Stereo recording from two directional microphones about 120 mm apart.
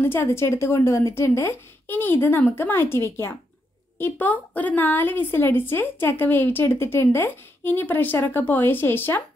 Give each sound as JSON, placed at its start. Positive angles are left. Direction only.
{"t": 0.0, "sound": "a woman's voice", "side_deg": 20}